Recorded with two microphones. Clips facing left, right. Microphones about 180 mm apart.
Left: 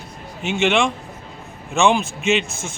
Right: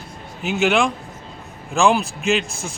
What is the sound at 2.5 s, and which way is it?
Speech, 30° right (ahead or behind).